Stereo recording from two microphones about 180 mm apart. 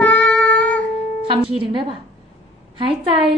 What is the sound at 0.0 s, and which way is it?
Music, 5° left (ahead or behind).